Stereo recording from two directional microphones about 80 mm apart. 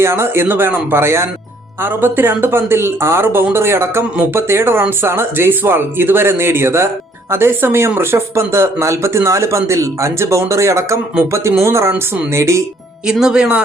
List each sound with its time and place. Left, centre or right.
0.0 s speech: right
13.1 s speech: centre